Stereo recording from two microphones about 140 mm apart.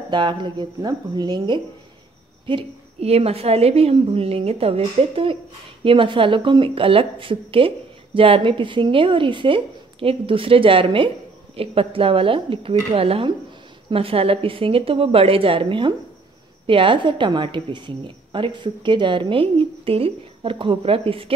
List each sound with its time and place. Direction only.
0.1 s speech: 35° right (ahead or behind)
2.4 s a woman's voice: 40° right (ahead or behind)